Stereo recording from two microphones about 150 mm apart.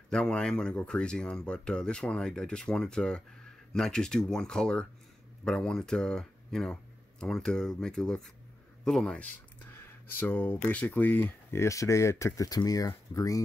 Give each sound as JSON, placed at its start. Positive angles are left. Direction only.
{"t": 0.1, "sound": "speech", "side_deg": 5}